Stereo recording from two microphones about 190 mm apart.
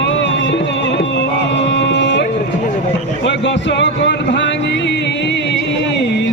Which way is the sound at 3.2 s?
70° left (ahead or behind).